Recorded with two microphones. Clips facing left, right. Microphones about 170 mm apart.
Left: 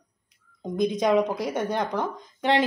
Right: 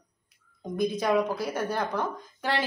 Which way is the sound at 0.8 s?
20° left (ahead or behind).